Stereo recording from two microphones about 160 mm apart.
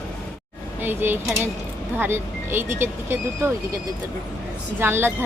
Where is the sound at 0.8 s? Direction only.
15° right (ahead or behind).